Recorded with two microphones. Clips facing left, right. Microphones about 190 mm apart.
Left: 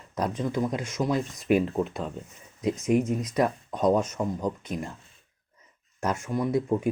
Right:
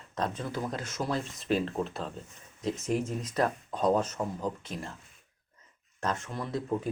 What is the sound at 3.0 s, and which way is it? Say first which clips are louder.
Speech: left 4 dB; 15° left (ahead or behind).